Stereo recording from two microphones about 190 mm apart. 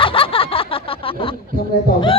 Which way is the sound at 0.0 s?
30° left (ahead or behind).